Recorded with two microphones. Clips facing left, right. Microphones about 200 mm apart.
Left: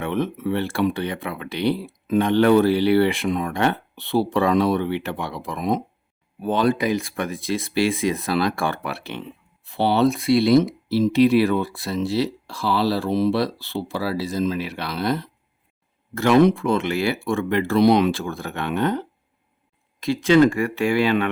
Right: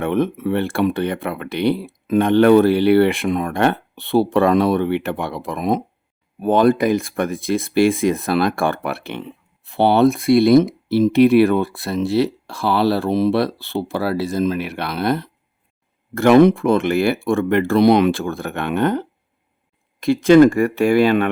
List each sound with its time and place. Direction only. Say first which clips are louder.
0.0 s speech: right 5 dB; 55° right (ahead or behind)